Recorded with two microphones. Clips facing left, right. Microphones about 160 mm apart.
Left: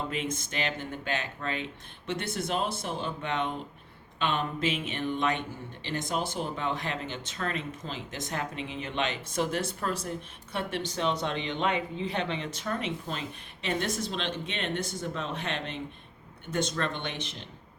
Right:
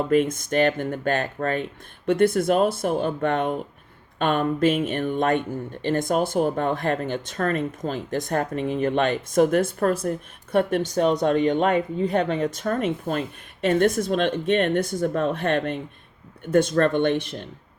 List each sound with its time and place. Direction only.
0.1 s speech: 55° right (ahead or behind)